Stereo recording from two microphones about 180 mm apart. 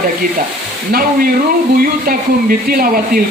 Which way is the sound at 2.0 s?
55° right (ahead or behind).